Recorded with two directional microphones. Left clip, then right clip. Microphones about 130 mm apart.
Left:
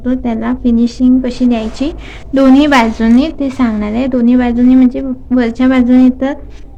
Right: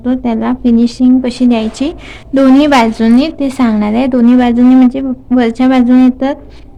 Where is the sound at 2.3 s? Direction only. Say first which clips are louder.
Right 1 dB; 20° right (ahead or behind).